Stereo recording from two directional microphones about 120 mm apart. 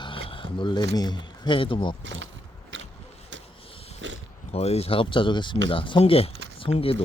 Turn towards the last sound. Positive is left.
turn(degrees=50)  # may be behind; listen again after turning